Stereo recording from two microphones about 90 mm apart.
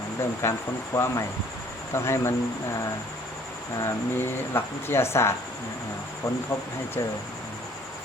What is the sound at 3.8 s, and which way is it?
Speech, 25° left (ahead or behind).